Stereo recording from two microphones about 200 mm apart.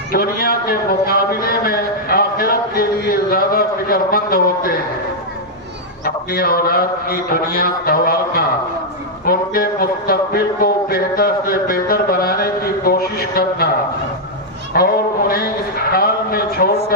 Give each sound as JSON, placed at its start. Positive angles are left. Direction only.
{"t": 0.1, "sound": "speech", "side_deg": 50}
{"t": 6.1, "sound": "speech", "side_deg": 50}
{"t": 14.7, "sound": "speech", "side_deg": 50}
{"t": 15.9, "sound": "a sound", "side_deg": 50}